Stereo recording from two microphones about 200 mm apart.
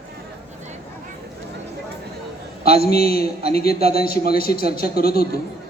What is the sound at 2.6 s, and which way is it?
A man's voice, 50° left (ahead or behind).